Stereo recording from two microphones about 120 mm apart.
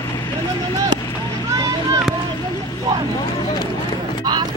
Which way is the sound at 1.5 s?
30° right (ahead or behind).